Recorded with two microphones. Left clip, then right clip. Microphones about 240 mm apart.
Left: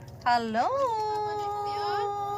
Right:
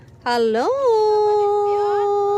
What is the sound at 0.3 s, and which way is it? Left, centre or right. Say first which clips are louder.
Dog: right 7 dB; centre.